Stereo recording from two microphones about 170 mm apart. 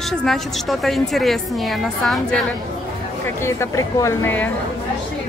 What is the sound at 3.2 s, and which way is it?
Speech, 15° left (ahead or behind).